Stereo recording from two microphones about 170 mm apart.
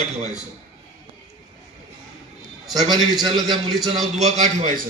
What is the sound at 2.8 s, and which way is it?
Speech, 25° right (ahead or behind).